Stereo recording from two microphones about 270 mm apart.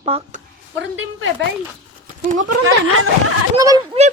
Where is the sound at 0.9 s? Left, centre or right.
Right.